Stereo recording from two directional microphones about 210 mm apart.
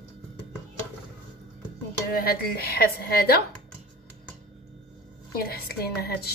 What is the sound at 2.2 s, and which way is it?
A woman's voice, 45° left (ahead or behind).